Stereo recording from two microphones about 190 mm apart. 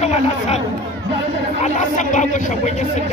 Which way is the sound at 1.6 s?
40° left (ahead or behind).